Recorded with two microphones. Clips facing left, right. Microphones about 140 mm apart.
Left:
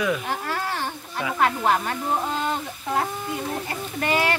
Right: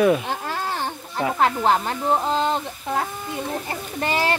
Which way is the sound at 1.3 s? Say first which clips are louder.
Right 1 dB; 25° right (ahead or behind).